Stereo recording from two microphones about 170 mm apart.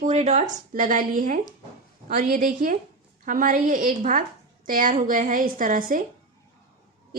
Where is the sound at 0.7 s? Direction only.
50° right (ahead or behind).